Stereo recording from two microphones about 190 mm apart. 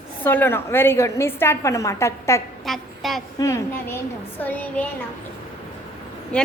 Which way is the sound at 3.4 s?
15° left (ahead or behind).